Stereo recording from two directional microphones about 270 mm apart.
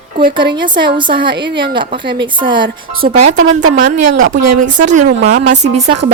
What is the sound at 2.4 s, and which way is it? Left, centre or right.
Speech, centre.